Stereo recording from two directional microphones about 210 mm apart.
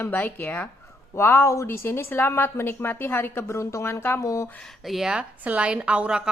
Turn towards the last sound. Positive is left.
turn(degrees=-5)  # may be behind; listen again after turning